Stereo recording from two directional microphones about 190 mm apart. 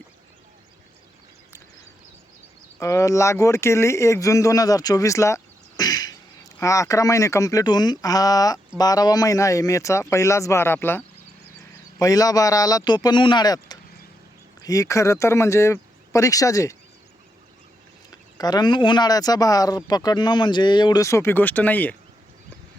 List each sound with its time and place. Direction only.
2.7 s speech: 15° left (ahead or behind)
18.3 s speech: 20° left (ahead or behind)